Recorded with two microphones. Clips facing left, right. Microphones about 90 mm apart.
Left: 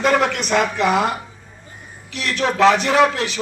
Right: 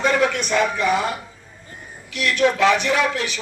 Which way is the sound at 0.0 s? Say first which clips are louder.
Left 2 dB; 55° left (ahead or behind).